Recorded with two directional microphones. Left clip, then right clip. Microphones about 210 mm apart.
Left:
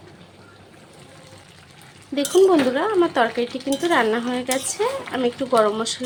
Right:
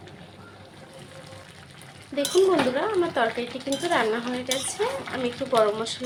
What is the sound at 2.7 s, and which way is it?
Speech, 35° left (ahead or behind).